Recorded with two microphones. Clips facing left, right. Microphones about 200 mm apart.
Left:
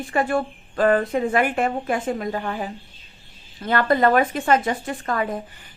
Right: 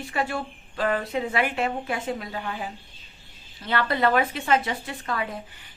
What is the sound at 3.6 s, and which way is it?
A woman's voice, 45° left (ahead or behind).